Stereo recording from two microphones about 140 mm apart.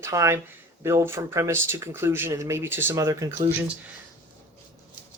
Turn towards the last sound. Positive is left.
turn(degrees=-10)  # may be behind; listen again after turning